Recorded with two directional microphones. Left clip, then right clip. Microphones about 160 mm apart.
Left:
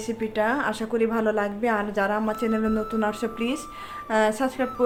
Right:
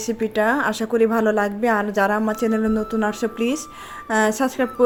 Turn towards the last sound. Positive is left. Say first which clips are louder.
# right 3 dB
turn(degrees=-35)  # may be behind; listen again after turning